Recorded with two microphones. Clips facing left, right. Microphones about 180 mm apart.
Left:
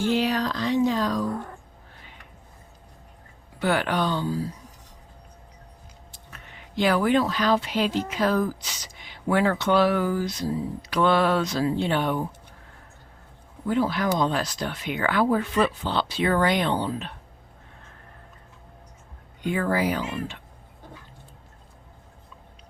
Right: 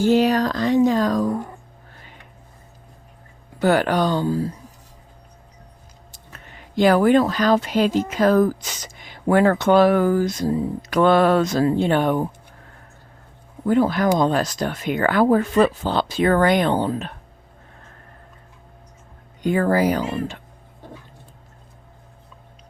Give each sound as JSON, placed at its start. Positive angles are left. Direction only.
{"t": 0.0, "sound": "speech", "side_deg": -45}
{"t": 3.6, "sound": "speech", "side_deg": -45}
{"t": 6.1, "sound": "speech", "side_deg": -45}
{"t": 13.7, "sound": "speech", "side_deg": -45}
{"t": 19.4, "sound": "speech", "side_deg": -40}